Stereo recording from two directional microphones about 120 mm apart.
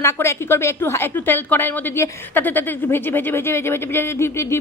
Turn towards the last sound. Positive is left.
turn(degrees=20)  # may be behind; listen again after turning